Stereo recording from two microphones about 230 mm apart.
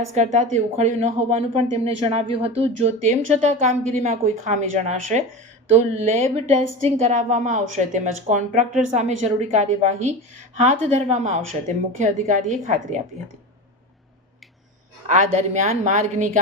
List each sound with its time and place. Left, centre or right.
0.1 s a woman's voice: right
15.0 s a woman's voice: right